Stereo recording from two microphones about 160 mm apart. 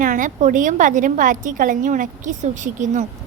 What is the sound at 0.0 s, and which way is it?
A woman's voice, 55° right (ahead or behind).